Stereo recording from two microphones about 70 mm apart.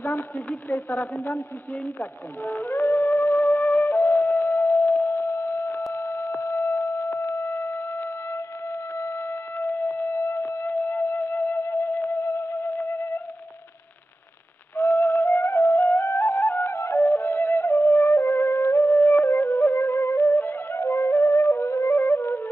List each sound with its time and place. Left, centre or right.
0.0 s speech: left
2.0 s music: left
9.6 s music: left
14.8 s music: left